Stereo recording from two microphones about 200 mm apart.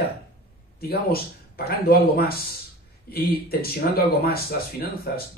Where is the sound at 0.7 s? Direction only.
50° left (ahead or behind).